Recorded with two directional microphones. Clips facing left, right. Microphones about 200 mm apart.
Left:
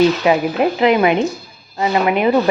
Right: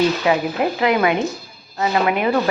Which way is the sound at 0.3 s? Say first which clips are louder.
Left 4 dB; 20° left (ahead or behind).